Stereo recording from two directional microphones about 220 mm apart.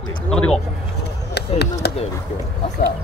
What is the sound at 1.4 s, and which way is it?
Chop, 50° left (ahead or behind).